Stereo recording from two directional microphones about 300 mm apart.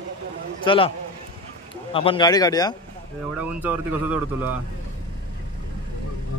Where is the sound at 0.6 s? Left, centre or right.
Centre.